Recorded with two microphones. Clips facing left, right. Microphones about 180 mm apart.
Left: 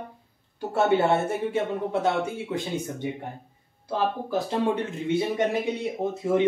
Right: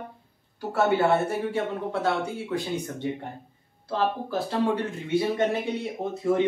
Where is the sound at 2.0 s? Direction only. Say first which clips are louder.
Left 1 dB; 20° left (ahead or behind).